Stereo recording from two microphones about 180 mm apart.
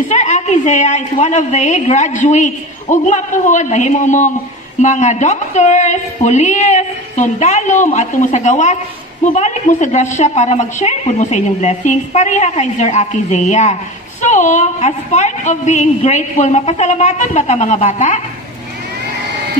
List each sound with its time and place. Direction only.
0.1 s a woman's voice: 40° left (ahead or behind)